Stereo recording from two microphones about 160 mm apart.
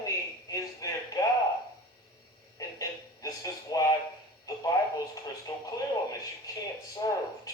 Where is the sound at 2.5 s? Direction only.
20° left (ahead or behind).